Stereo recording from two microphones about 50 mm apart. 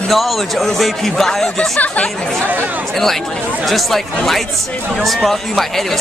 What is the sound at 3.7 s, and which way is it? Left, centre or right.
Speech, centre.